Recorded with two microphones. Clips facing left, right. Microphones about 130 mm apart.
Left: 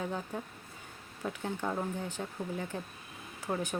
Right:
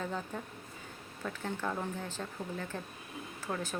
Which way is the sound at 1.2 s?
15° left (ahead or behind).